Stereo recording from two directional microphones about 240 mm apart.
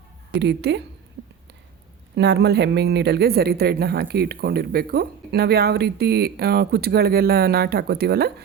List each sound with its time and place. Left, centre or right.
0.3 s a woman's voice: right
2.1 s speech: right